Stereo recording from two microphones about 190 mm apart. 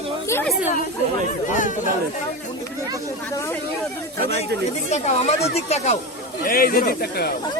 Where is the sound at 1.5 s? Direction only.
40° left (ahead or behind).